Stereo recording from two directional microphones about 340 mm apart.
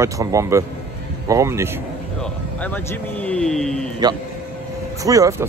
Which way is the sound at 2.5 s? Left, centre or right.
Centre.